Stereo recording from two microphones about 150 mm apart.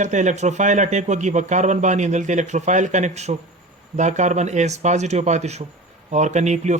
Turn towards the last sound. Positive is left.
turn(degrees=-50)  # may be behind; listen again after turning